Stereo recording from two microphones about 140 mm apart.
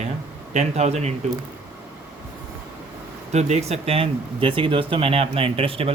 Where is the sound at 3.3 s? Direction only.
50° right (ahead or behind).